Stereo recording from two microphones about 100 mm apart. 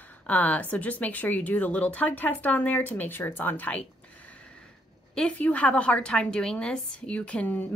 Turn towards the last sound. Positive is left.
turn(degrees=15)  # may be behind; listen again after turning